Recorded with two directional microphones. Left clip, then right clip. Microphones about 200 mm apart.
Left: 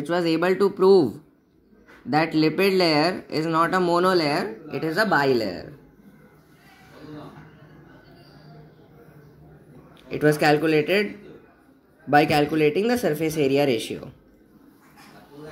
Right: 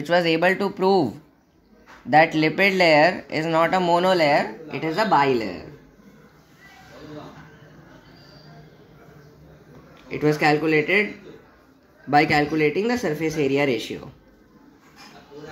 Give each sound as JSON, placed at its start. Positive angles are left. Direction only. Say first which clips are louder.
{"t": 0.0, "sound": "speech", "louder": "right 4 dB", "side_deg": -15}
{"t": 4.6, "sound": "a woman's voice", "louder": "right 1 dB", "side_deg": 10}
{"t": 10.0, "sound": "speech", "louder": "even", "side_deg": 20}
{"t": 12.1, "sound": "speech", "louder": "even", "side_deg": 20}